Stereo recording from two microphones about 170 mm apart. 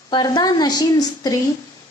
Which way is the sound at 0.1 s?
25° left (ahead or behind).